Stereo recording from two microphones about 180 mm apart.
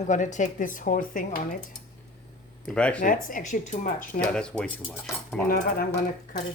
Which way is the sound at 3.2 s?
45° left (ahead or behind).